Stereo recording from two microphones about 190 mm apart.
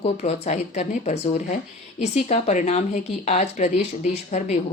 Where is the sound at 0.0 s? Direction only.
35° left (ahead or behind).